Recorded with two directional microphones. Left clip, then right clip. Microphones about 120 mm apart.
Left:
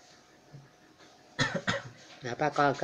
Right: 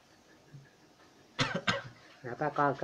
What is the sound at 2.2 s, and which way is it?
Speech, 30° left (ahead or behind).